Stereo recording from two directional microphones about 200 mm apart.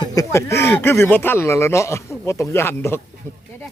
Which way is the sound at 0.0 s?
15° left (ahead or behind).